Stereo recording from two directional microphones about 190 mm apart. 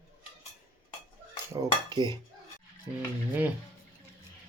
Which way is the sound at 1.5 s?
20° right (ahead or behind).